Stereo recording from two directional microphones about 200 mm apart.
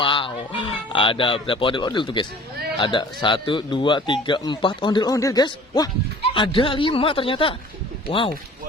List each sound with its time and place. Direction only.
0.0 s a man's voice: 25° left (ahead or behind)